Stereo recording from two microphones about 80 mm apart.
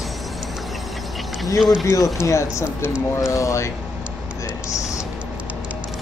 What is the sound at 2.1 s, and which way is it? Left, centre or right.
Speech, left.